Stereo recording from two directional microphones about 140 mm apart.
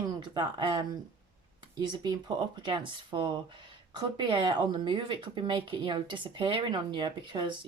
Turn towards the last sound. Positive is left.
turn(degrees=-35)  # may be behind; listen again after turning